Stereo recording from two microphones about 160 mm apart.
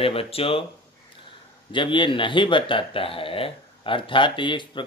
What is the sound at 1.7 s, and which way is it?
Speech, 30° left (ahead or behind).